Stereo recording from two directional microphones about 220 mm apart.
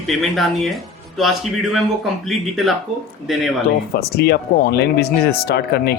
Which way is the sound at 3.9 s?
45° left (ahead or behind).